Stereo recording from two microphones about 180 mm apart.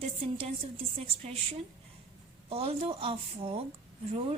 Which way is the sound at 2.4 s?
30° right (ahead or behind).